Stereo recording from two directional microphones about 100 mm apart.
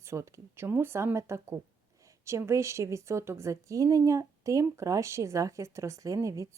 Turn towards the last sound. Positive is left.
turn(degrees=-30)  # may be behind; listen again after turning